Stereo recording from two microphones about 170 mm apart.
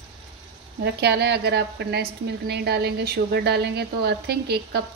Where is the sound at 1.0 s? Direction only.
75° right (ahead or behind).